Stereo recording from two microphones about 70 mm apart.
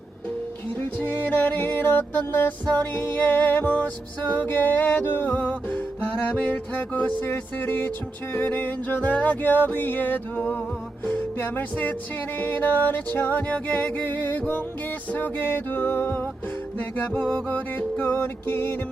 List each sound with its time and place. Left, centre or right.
0.8 s music: left
7.3 s music: left
16.7 s music: centre